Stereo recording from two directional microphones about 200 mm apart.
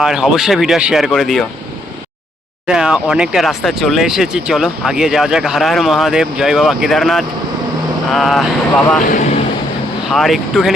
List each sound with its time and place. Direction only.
0.0 s speech: centre (ahead or behind)
2.6 s speech: 5° right (ahead or behind)
9.0 s speech: 40° left (ahead or behind)
10.1 s speech: centre (ahead or behind)